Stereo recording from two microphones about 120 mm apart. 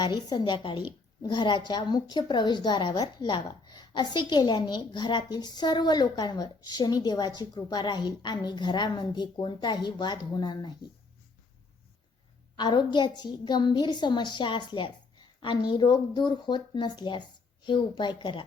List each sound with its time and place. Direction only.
0.0 s a woman's voice: 35° left (ahead or behind)
12.5 s a woman's voice: 40° left (ahead or behind)